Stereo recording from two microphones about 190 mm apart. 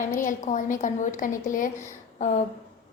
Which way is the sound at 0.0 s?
45° left (ahead or behind).